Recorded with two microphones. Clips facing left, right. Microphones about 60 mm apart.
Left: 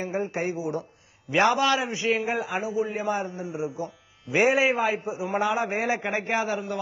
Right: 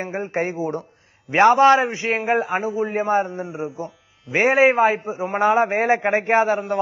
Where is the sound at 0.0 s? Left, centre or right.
Right.